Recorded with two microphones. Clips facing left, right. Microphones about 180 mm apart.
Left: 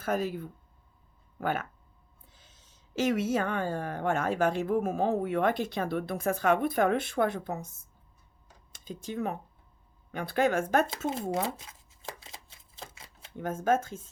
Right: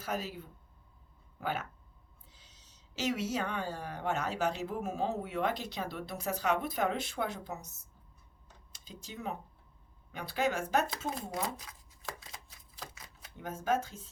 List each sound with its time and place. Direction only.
0.0 s speech: 55° left (ahead or behind)
8.7 s speech: 50° left (ahead or behind)
11.4 s shuffling cards: 25° left (ahead or behind)
13.3 s speech: 50° left (ahead or behind)